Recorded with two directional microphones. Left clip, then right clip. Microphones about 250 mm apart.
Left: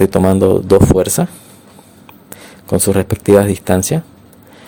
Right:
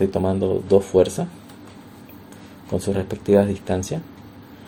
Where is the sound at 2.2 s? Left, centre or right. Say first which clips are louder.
Left 10 dB; left.